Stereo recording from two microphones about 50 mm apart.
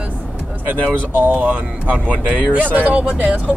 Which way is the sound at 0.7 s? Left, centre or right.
Right.